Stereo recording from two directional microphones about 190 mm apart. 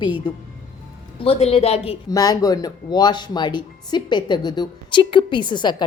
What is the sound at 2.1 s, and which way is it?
Speech, 20° left (ahead or behind).